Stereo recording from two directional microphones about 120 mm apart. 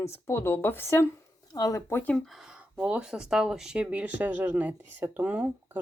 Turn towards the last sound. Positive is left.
turn(degrees=-15)  # may be behind; listen again after turning